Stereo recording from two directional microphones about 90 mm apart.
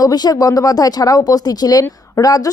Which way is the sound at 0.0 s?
45° left (ahead or behind).